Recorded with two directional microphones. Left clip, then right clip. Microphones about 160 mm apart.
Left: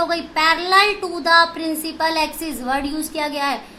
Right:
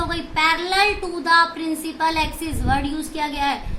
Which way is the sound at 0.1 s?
45° left (ahead or behind).